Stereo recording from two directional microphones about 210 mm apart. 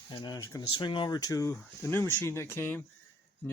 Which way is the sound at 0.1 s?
20° left (ahead or behind).